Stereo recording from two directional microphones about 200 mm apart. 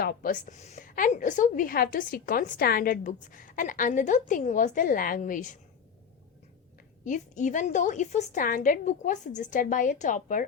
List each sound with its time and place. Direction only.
0.0 s a woman's voice: 45° left (ahead or behind)
7.0 s a woman's voice: 40° left (ahead or behind)